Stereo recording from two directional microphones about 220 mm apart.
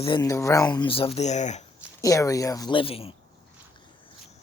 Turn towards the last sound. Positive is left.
turn(degrees=25)  # may be behind; listen again after turning